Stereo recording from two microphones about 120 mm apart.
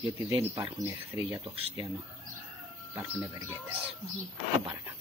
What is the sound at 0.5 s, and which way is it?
Speech, 30° right (ahead or behind).